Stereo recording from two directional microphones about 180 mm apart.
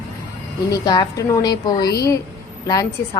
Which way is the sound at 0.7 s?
20° left (ahead or behind).